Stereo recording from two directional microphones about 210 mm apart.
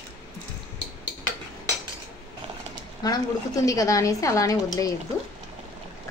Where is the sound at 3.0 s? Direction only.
15° left (ahead or behind).